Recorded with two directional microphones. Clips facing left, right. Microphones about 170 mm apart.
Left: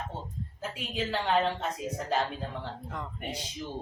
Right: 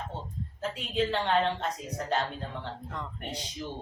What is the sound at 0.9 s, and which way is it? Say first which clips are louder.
Speech: right 1 dB; 5° left (ahead or behind).